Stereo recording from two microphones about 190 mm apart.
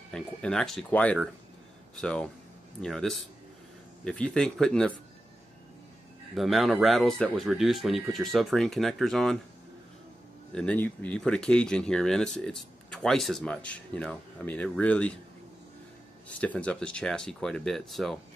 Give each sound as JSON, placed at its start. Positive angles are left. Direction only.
{"t": 0.1, "sound": "speech", "side_deg": 5}
{"t": 6.3, "sound": "speech", "side_deg": 0}
{"t": 10.5, "sound": "speech", "side_deg": 5}
{"t": 16.3, "sound": "speech", "side_deg": 5}